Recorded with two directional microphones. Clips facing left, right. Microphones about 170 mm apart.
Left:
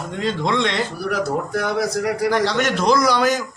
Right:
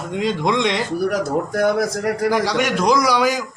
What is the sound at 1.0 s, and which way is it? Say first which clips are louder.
A man's voice: right 3 dB; 45° right (ahead or behind).